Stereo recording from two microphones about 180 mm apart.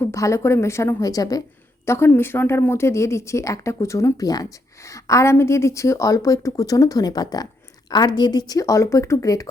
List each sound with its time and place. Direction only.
0.0 s speech: 15° left (ahead or behind)